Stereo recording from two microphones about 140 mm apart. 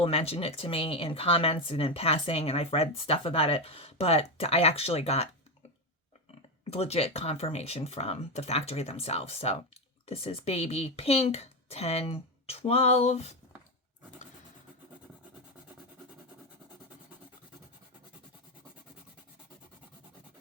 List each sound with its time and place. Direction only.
0.0 s speech: 45° left (ahead or behind)
6.7 s speech: 45° left (ahead or behind)